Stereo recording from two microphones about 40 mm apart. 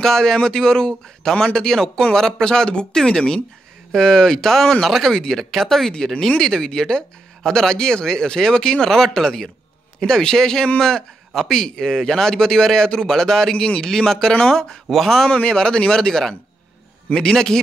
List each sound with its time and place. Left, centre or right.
0.0 s a man's voice: centre
15.2 s a man's voice: left